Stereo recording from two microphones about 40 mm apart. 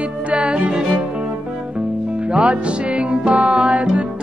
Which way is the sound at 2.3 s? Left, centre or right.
Right.